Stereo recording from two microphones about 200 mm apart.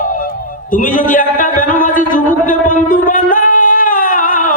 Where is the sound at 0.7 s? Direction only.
40° left (ahead or behind).